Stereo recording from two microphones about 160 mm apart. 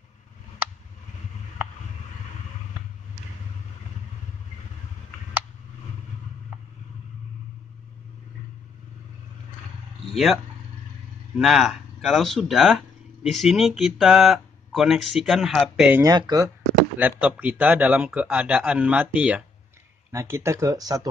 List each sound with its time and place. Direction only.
10.1 s speech: centre (ahead or behind)
16.0 s speech: 25° right (ahead or behind)
17.2 s speech: 10° right (ahead or behind)